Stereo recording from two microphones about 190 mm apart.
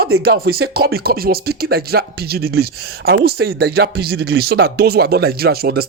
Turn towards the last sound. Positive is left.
turn(degrees=-55)  # may be behind; listen again after turning